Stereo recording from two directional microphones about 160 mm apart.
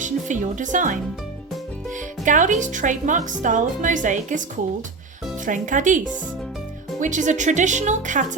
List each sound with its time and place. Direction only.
0.0 s a woman's voice: 50° right (ahead or behind)
2.2 s speech: 55° right (ahead or behind)
7.0 s speech: 50° right (ahead or behind)